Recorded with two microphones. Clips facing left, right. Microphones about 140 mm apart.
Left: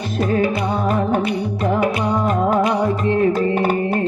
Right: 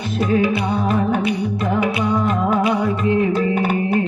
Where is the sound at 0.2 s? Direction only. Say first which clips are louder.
Even; 40° left (ahead or behind).